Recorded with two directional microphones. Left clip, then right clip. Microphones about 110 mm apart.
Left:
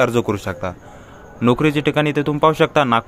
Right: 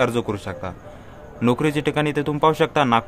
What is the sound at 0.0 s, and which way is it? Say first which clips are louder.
A man's voice: left 4 dB; 45° left (ahead or behind).